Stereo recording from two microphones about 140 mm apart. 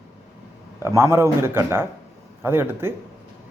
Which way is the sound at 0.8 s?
20° right (ahead or behind).